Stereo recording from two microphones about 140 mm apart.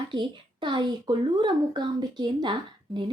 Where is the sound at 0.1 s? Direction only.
35° right (ahead or behind).